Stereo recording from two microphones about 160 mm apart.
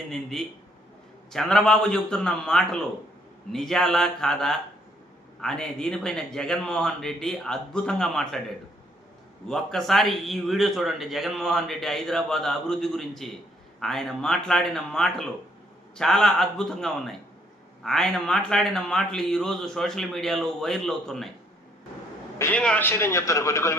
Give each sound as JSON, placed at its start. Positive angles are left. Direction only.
{"t": 0.1, "sound": "a man's voice", "side_deg": 0}
{"t": 22.4, "sound": "a man's voice", "side_deg": 10}